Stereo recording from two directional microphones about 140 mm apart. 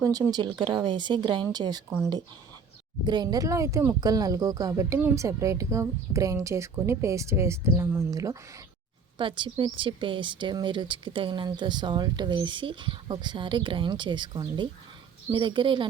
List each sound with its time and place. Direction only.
0.0 s a woman's voice: 25° right (ahead or behind)
3.0 s speech: 30° right (ahead or behind)
9.1 s a woman's voice: 35° right (ahead or behind)